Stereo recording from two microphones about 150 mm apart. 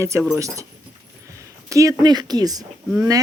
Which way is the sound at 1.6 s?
20° right (ahead or behind).